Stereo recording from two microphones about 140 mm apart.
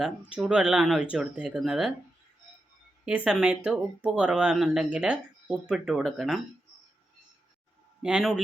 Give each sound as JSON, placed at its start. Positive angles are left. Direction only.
{"t": 0.0, "sound": "speech", "side_deg": -5}
{"t": 3.1, "sound": "speech", "side_deg": -10}
{"t": 8.0, "sound": "speech", "side_deg": -5}